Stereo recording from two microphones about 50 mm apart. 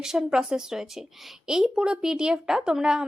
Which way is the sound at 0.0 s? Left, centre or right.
Centre.